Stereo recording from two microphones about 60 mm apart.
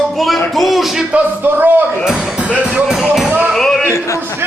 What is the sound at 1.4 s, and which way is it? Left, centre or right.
Speech, right.